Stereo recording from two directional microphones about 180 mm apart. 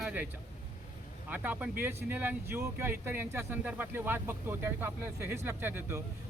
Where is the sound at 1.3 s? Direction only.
10° right (ahead or behind).